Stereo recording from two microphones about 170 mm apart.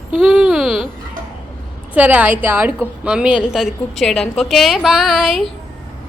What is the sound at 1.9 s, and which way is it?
A woman's voice, 10° right (ahead or behind).